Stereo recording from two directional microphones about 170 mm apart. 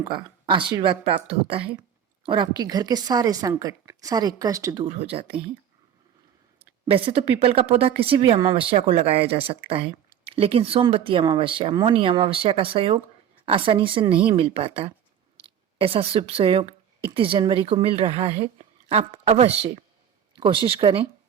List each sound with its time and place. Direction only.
0.0 s a woman's voice: 30° right (ahead or behind)
4.9 s a woman's voice: 35° right (ahead or behind)
6.6 s a woman's voice: 30° right (ahead or behind)